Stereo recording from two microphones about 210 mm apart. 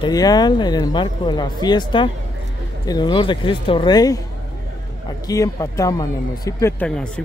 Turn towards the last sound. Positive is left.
turn(degrees=5)  # may be behind; listen again after turning